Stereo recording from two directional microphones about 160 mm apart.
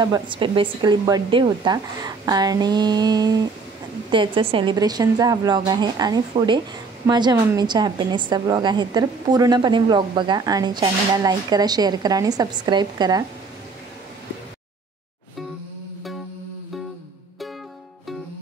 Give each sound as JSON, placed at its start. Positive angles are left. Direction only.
{"t": 0.0, "sound": "a woman's voice", "side_deg": -30}